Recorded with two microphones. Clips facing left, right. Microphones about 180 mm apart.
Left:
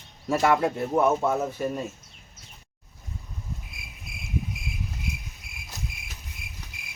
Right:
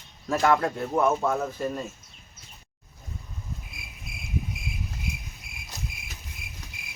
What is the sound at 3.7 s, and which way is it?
Cricket, centre (ahead or behind).